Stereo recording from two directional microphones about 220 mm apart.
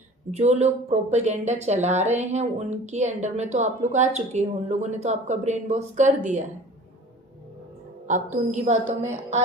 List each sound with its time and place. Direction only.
0.3 s speech: 30° right (ahead or behind)
8.0 s speech: 35° right (ahead or behind)